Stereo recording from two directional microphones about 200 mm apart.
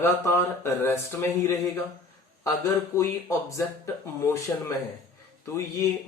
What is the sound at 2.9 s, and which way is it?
Speech, 15° left (ahead or behind).